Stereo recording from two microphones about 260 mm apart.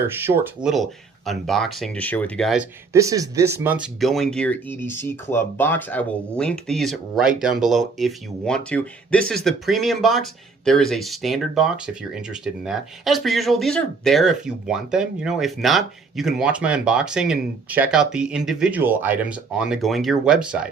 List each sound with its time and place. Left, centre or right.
0.2 s speech: centre
2.9 s speech: centre